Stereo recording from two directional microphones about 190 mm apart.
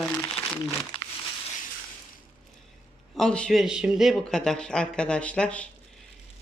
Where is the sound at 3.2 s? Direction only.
5° left (ahead or behind).